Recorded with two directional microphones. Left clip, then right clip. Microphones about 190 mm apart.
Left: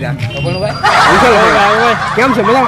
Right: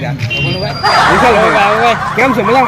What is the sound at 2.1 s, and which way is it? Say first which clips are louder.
Speech: even; 15° left (ahead or behind).